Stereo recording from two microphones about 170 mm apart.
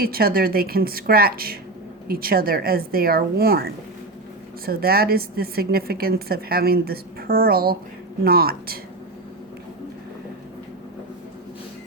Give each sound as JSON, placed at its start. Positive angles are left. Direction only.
{"t": 0.0, "sound": "a woman's voice", "side_deg": -60}